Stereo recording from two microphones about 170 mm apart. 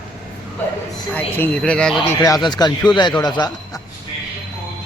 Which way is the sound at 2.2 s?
20° left (ahead or behind).